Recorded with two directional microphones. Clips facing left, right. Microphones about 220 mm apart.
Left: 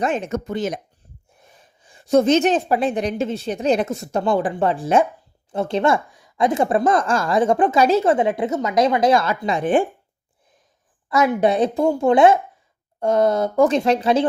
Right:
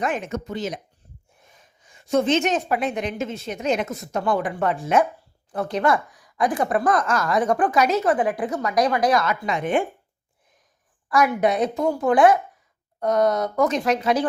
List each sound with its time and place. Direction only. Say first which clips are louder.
0.0 s a woman's voice: left 4 dB; 30° left (ahead or behind)
0.3 s speech: left 4 dB; 50° left (ahead or behind)
1.4 s a woman's voice: left 3 dB; 35° left (ahead or behind)
11.3 s speech: left 3 dB; 30° left (ahead or behind)